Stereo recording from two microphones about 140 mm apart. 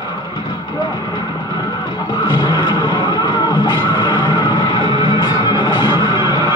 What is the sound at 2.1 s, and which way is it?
Music, 35° left (ahead or behind).